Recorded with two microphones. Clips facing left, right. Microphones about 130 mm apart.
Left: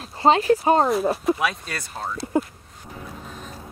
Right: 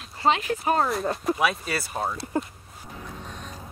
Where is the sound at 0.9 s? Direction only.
Centre (ahead or behind).